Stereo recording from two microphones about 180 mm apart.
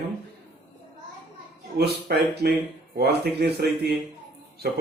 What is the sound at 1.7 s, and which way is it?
A man's voice, 65° right (ahead or behind).